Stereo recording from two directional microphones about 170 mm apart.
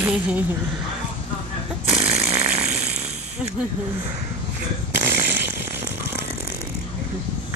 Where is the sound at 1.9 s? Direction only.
35° right (ahead or behind).